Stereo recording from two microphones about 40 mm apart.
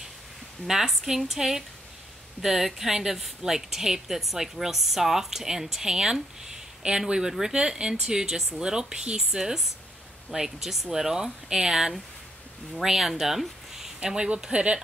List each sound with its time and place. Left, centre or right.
0.7 s a woman's voice: centre
14.0 s speech: centre